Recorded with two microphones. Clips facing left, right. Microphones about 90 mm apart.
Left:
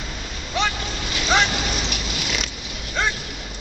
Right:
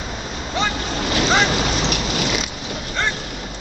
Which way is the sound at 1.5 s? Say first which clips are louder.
Right 6 dB; 60° right (ahead or behind).